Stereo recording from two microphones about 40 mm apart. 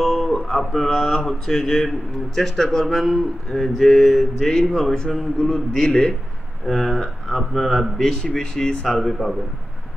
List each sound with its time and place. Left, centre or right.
0.0 s a sound: centre
0.5 s speech: centre
5.9 s a man's voice: left
6.6 s speech: centre
8.0 s speech: centre
8.9 s speech: centre